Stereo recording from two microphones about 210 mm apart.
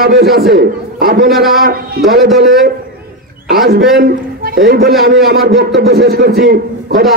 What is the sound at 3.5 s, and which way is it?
A man's voice, 45° right (ahead or behind).